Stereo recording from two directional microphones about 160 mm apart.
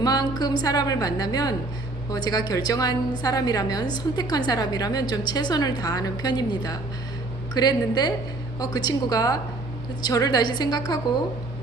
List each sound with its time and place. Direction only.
0.0 s a woman's voice: 25° left (ahead or behind)